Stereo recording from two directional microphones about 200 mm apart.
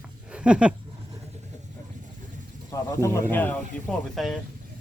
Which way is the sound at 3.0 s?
15° left (ahead or behind).